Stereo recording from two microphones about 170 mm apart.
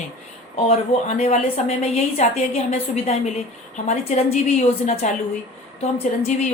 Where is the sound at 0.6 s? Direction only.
40° left (ahead or behind).